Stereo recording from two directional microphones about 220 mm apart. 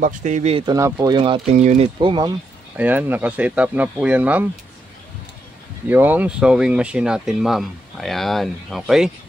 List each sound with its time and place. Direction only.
0.0 s speech: 35° right (ahead or behind)
2.8 s speech: 10° right (ahead or behind)
5.9 s speech: 10° right (ahead or behind)